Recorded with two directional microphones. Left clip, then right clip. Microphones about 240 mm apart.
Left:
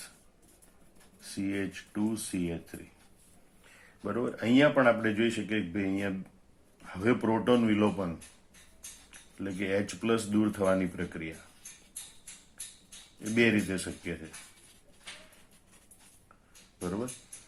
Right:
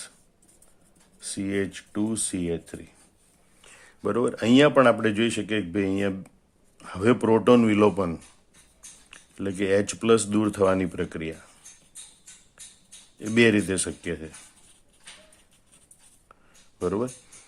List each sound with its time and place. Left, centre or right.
1.2 s speech: right
4.0 s speech: right
13.2 s speech: right